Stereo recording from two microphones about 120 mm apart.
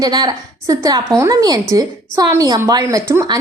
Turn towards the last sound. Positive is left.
turn(degrees=-30)  # may be behind; listen again after turning